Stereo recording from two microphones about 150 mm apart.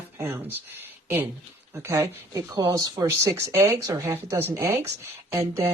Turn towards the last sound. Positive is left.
turn(degrees=-15)  # may be behind; listen again after turning